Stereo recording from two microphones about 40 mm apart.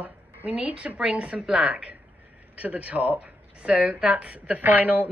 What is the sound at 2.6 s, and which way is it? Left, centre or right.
A woman's voice, right.